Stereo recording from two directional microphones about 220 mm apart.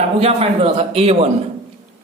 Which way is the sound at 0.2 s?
25° right (ahead or behind).